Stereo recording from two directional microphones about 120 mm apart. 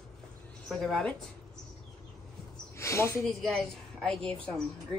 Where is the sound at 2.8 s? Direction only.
25° left (ahead or behind).